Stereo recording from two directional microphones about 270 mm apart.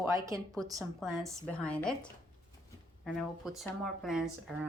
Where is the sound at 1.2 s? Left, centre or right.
Centre.